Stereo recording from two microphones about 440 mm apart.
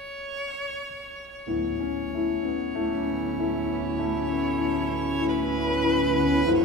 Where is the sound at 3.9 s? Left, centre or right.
Centre.